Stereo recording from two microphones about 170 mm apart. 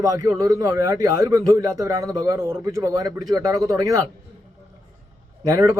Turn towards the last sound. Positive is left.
turn(degrees=-20)  # may be behind; listen again after turning